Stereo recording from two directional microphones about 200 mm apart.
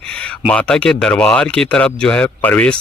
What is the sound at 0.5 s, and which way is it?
Speech, 5° left (ahead or behind).